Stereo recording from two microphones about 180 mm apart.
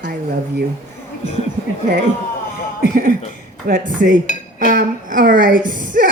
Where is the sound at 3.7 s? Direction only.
50° right (ahead or behind).